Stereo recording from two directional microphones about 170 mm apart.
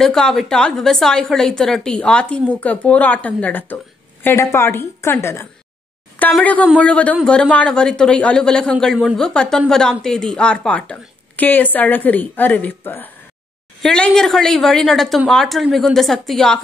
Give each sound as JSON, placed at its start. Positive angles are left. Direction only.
{"t": 0.0, "sound": "a woman's voice", "side_deg": 5}